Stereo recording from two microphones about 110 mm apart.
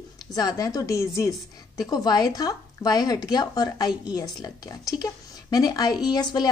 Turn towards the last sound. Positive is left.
turn(degrees=40)  # may be behind; listen again after turning